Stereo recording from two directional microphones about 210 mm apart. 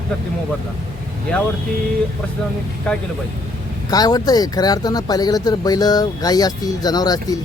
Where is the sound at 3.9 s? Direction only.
20° left (ahead or behind).